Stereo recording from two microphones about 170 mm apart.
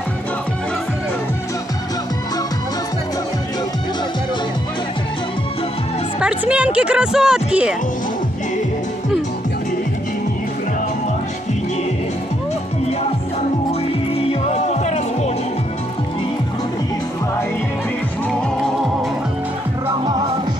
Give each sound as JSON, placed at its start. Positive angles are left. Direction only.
{"t": 6.1, "sound": "speech", "side_deg": -5}
{"t": 14.5, "sound": "music", "side_deg": 40}